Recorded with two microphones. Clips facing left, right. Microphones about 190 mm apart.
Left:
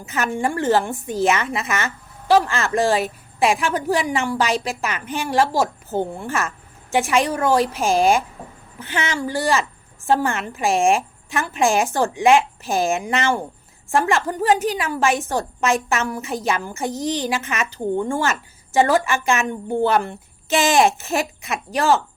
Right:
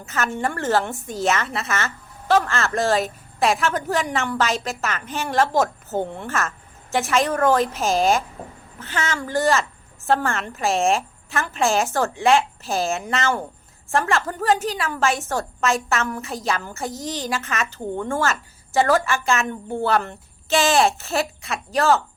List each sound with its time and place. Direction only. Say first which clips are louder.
0.0 s a woman's voice: left 2 dB; 15° left (ahead or behind)